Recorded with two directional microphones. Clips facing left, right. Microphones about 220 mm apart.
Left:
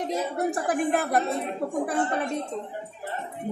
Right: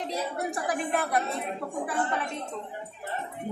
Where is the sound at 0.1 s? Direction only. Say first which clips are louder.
Left 5 dB; 50° left (ahead or behind).